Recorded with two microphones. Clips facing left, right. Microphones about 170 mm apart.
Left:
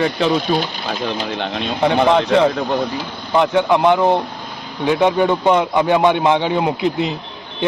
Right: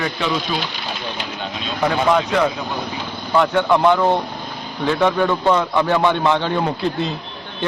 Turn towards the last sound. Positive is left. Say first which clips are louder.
# left 3 dB
turn(degrees=15)  # may be behind; listen again after turning